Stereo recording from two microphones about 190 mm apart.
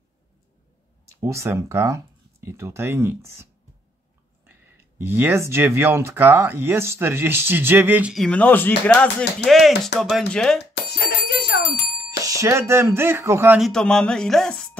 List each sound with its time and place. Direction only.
1.2 s speech: 15° right (ahead or behind)
4.9 s speech: 10° right (ahead or behind)
10.6 s bicycle bell: 65° left (ahead or behind)
12.2 s speech: 15° right (ahead or behind)
13.6 s speech: 5° left (ahead or behind)